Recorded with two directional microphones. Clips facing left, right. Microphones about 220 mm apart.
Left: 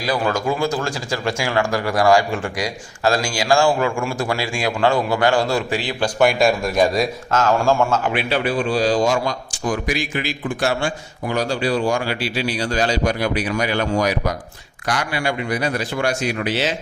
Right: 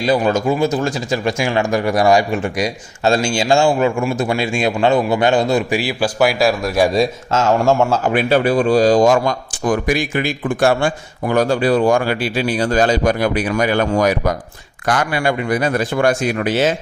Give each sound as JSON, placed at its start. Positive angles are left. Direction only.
{"t": 0.0, "sound": "a man's voice", "side_deg": -20}
{"t": 6.9, "sound": "a man's voice", "side_deg": -25}
{"t": 8.1, "sound": "a man's voice", "side_deg": -45}